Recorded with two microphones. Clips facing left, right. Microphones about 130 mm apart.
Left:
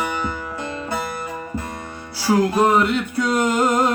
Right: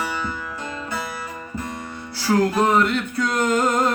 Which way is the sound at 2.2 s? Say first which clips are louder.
Left 2 dB; 10° left (ahead or behind).